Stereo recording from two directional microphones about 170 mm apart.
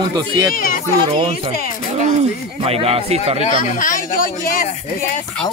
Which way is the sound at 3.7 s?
50° left (ahead or behind).